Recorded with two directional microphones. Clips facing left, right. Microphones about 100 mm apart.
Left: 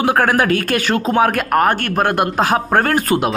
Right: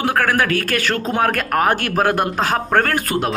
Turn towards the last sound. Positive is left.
turn(degrees=25)  # may be behind; listen again after turning